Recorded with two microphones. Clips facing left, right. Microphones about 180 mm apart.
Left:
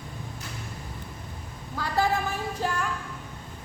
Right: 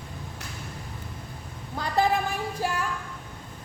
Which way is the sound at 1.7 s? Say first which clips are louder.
Right 2 dB; 20° right (ahead or behind).